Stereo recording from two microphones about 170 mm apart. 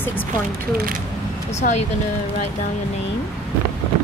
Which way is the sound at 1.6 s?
55° left (ahead or behind).